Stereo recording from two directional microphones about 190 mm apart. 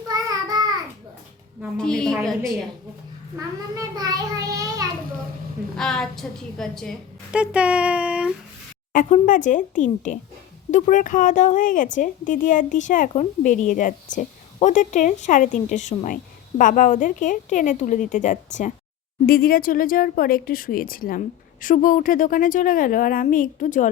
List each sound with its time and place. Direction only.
0.1 s child singing: 20° right (ahead or behind)
1.8 s a woman's voice: 5° left (ahead or behind)
3.4 s a child's voice: 15° right (ahead or behind)
5.7 s a woman's voice: 5° left (ahead or behind)
8.9 s a woman's voice: 40° left (ahead or behind)
19.2 s a woman's voice: 50° left (ahead or behind)